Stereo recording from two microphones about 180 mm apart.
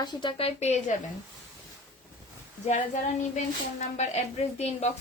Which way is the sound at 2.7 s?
40° left (ahead or behind).